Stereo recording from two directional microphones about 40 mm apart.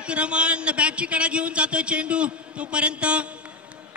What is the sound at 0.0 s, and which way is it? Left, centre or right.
A man's voice, right.